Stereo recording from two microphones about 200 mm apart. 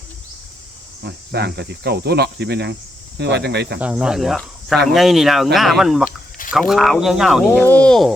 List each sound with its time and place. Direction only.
1.0 s speech: 55° right (ahead or behind)
3.8 s speech: 5° right (ahead or behind)